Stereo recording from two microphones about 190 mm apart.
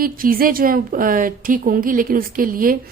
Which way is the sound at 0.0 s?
50° right (ahead or behind).